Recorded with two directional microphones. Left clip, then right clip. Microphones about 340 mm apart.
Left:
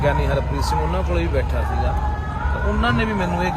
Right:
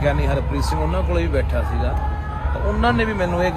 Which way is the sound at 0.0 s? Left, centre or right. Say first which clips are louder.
Left 1 dB; centre.